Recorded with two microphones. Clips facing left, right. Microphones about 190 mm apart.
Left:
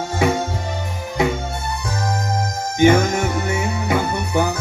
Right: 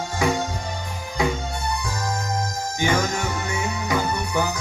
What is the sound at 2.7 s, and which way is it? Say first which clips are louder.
Music: left 9 dB; 20° left (ahead or behind).